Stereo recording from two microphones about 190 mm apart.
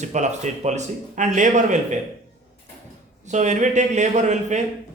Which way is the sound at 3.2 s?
40° right (ahead or behind).